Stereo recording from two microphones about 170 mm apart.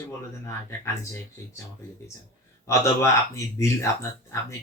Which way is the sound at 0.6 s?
15° left (ahead or behind).